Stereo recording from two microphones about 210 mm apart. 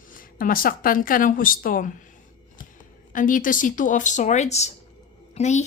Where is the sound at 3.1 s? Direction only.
40° left (ahead or behind).